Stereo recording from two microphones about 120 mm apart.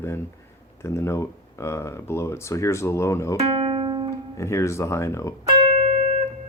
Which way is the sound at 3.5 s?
50° right (ahead or behind).